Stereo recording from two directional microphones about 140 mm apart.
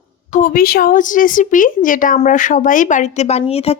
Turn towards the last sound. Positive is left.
turn(degrees=45)  # may be behind; listen again after turning